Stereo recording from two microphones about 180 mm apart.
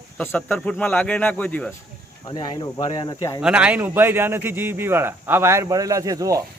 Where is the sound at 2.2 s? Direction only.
25° left (ahead or behind).